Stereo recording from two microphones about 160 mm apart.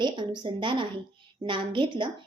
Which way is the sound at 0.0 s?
30° right (ahead or behind).